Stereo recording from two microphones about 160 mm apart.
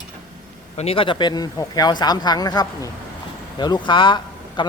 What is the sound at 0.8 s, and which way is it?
A man's voice, 35° left (ahead or behind).